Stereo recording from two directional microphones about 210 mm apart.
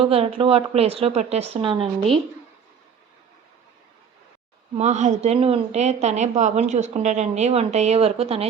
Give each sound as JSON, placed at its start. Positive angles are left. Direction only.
{"t": 0.0, "sound": "a woman's voice", "side_deg": -30}
{"t": 4.8, "sound": "a woman's voice", "side_deg": -35}